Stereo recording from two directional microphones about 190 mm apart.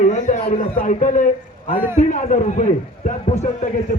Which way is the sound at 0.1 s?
35° left (ahead or behind).